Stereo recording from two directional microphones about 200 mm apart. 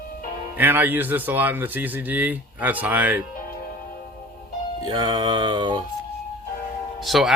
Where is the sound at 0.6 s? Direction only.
10° right (ahead or behind).